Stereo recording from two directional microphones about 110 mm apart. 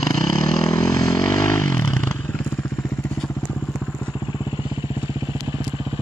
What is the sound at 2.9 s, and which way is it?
Vehicle, 15° left (ahead or behind).